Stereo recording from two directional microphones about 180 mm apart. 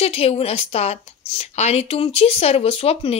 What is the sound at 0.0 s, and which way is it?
Speech, 35° left (ahead or behind).